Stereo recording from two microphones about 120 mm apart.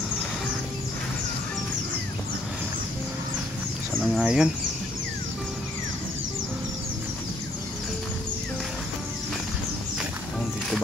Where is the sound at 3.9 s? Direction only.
5° right (ahead or behind).